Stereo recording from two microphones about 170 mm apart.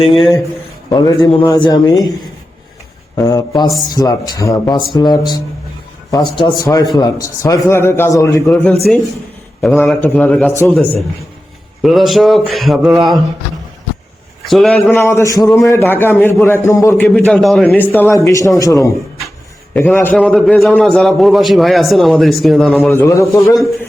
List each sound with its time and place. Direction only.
0.1 s a man's voice: centre (ahead or behind)
0.9 s a man's voice: 25° left (ahead or behind)
3.2 s a man's voice: 20° left (ahead or behind)
11.8 s a man's voice: centre (ahead or behind)
14.4 s a man's voice: centre (ahead or behind)
17.2 s a man's voice: centre (ahead or behind)
22.9 s a man's voice: 15° left (ahead or behind)
23.2 s a man's voice: centre (ahead or behind)